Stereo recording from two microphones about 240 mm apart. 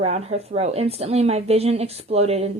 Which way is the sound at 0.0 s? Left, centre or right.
Right.